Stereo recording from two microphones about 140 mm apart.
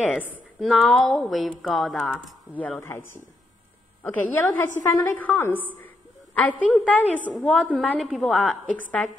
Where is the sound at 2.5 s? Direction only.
10° left (ahead or behind).